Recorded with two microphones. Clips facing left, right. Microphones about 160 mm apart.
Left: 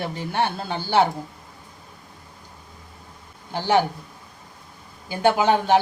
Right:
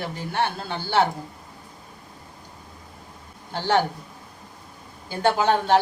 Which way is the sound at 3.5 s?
10° left (ahead or behind).